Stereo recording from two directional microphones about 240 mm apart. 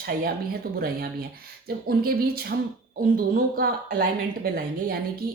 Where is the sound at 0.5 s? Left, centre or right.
Right.